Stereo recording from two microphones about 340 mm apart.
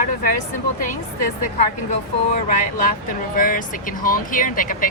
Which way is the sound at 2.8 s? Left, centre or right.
Left.